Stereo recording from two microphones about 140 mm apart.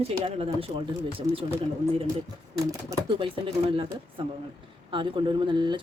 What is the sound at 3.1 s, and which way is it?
Speech, 40° right (ahead or behind).